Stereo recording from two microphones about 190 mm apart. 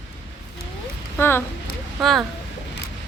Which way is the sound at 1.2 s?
10° left (ahead or behind).